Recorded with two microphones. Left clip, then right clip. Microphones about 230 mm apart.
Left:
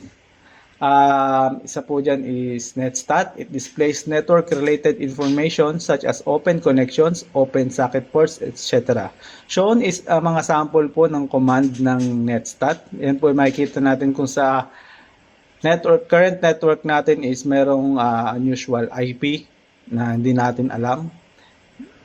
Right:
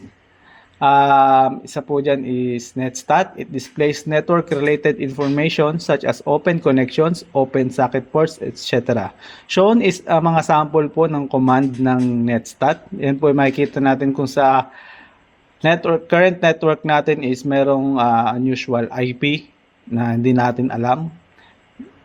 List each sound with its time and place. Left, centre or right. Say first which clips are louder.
0.8 s speech: right 3 dB; right